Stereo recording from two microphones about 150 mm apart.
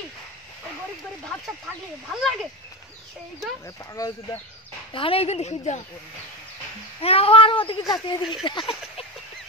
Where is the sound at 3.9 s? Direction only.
20° left (ahead or behind).